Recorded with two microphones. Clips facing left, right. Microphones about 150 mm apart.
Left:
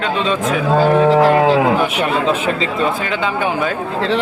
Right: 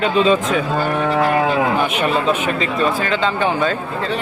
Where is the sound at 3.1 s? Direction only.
10° left (ahead or behind).